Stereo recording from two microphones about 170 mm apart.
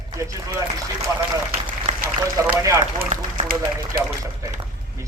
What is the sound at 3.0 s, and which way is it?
Speech, 55° right (ahead or behind).